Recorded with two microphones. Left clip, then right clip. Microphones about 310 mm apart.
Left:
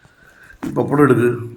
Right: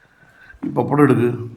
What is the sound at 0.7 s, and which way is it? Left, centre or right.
Speech, right.